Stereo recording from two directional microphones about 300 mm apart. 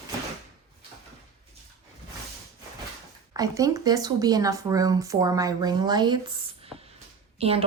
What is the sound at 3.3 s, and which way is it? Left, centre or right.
Speech, centre.